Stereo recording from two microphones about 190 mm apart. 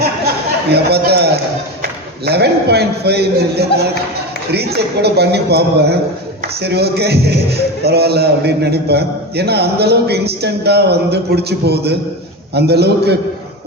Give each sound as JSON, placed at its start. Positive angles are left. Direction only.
{"t": 0.7, "sound": "a man's voice", "side_deg": -60}